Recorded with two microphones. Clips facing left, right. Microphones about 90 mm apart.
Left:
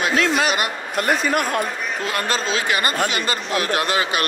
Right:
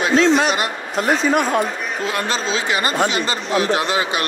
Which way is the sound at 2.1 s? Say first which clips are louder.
Even; 55° left (ahead or behind).